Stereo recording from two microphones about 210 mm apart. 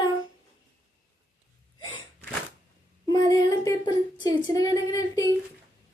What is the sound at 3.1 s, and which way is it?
Child singing, 15° left (ahead or behind).